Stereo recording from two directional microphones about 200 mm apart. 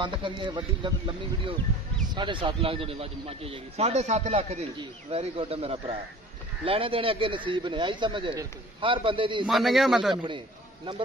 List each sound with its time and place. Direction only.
0.0 s speech: 25° right (ahead or behind)
9.5 s a man's voice: centre (ahead or behind)
10.1 s speech: 25° right (ahead or behind)